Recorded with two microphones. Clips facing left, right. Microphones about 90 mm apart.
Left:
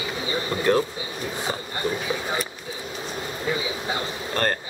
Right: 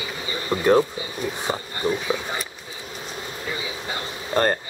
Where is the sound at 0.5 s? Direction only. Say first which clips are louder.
Right 4 dB; 15° right (ahead or behind).